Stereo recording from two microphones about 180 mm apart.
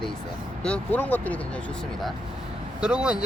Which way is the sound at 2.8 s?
5° right (ahead or behind).